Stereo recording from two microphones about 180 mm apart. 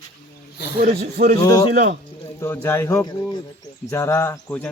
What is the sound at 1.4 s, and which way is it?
A man's voice, 20° left (ahead or behind).